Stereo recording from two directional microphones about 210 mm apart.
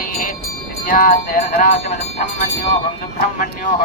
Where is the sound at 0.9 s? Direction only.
40° left (ahead or behind).